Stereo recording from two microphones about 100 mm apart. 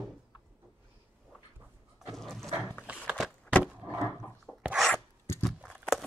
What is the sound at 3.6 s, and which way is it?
Wood, 15° right (ahead or behind).